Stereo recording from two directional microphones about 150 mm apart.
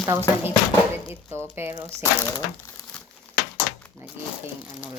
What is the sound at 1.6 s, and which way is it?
Speech, 15° right (ahead or behind).